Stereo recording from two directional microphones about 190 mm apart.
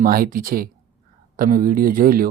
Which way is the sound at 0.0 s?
50° right (ahead or behind).